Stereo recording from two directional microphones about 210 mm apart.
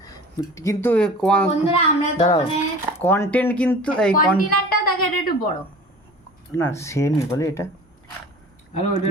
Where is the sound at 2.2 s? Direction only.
20° left (ahead or behind).